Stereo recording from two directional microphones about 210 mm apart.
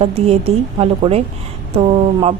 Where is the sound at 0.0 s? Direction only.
30° right (ahead or behind).